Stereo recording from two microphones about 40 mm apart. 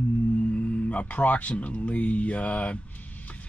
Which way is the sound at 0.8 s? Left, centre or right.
Left.